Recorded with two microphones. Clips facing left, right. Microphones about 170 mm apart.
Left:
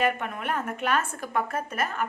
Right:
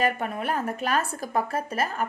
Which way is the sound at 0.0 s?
35° right (ahead or behind).